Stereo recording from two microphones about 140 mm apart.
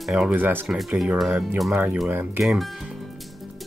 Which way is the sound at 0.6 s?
Centre (ahead or behind).